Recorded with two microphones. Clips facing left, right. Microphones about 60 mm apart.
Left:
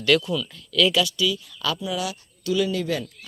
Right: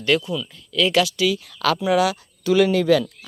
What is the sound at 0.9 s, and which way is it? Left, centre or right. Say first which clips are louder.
Speech: right 4 dB; right.